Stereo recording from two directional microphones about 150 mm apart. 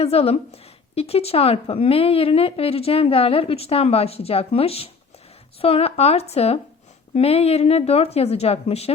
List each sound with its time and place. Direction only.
0.0 s a woman's voice: 40° left (ahead or behind)